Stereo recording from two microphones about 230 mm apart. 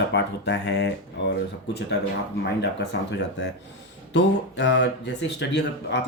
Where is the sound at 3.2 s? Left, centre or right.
Left.